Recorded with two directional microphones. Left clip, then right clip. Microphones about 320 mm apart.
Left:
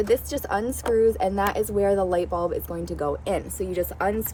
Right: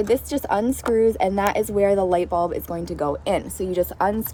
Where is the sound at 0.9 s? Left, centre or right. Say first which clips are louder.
Right 1 dB; right.